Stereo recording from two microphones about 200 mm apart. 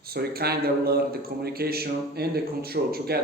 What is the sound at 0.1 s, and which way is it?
Speech, 50° right (ahead or behind).